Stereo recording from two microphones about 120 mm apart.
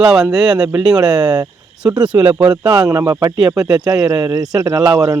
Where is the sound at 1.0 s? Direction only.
35° right (ahead or behind).